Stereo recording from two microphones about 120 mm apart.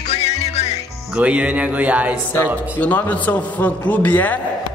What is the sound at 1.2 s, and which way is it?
A man's voice, 10° right (ahead or behind).